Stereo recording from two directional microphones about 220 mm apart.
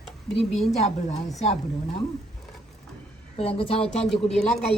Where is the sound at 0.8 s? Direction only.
30° left (ahead or behind).